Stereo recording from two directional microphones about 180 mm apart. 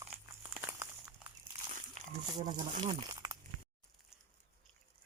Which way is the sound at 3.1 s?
20° right (ahead or behind).